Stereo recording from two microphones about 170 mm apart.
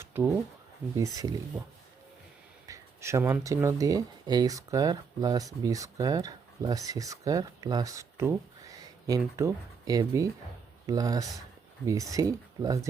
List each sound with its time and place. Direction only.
0.1 s speech: 10° right (ahead or behind)
2.6 s speech: 20° right (ahead or behind)